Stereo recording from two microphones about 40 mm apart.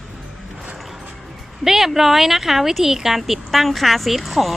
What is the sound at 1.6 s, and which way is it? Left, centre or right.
Speech, centre.